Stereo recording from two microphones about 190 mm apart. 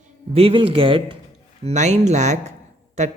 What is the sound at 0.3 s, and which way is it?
A man's voice, 30° right (ahead or behind).